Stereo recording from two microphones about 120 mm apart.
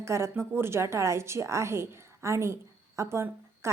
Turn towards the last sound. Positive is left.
turn(degrees=-25)  # may be behind; listen again after turning